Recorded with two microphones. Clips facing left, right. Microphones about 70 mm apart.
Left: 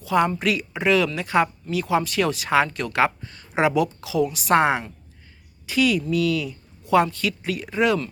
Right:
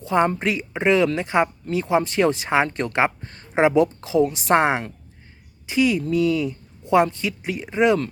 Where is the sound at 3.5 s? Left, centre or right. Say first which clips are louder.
Right 3 dB; right.